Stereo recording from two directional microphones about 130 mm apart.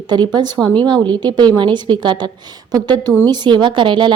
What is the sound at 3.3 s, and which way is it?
Speech, 35° right (ahead or behind).